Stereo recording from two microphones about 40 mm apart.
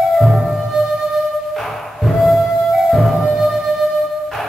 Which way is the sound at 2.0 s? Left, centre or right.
Centre.